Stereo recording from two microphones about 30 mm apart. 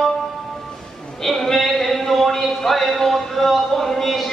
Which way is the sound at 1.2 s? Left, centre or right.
Centre.